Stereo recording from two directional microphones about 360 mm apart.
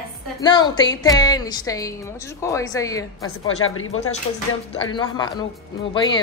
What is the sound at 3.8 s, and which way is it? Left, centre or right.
Speech, left.